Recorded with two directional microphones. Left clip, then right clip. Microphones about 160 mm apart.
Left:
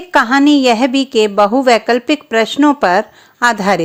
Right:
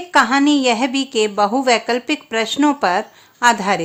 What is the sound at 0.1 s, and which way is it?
A woman's voice, 30° left (ahead or behind).